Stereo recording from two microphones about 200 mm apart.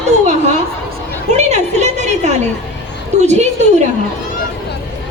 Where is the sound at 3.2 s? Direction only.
35° right (ahead or behind).